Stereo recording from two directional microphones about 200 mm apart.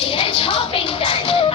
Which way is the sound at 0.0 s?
25° left (ahead or behind).